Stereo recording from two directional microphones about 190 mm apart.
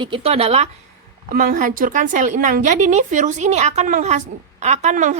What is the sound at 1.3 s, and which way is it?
A woman's voice, 50° right (ahead or behind).